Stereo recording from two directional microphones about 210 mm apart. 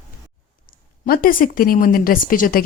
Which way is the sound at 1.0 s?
40° left (ahead or behind).